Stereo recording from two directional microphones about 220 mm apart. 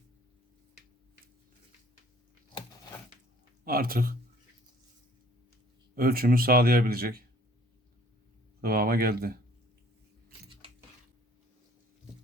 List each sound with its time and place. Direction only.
3.6 s speech: 40° right (ahead or behind)
6.0 s speech: 40° right (ahead or behind)
8.6 s speech: 45° right (ahead or behind)